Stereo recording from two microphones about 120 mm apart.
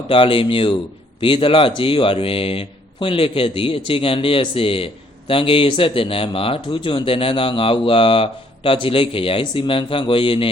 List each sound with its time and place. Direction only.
0.1 s speech: 50° left (ahead or behind)